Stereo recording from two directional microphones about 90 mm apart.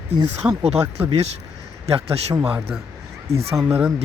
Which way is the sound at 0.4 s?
20° right (ahead or behind).